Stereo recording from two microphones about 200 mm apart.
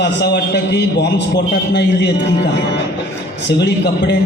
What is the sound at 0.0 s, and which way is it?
A man's voice, 55° left (ahead or behind).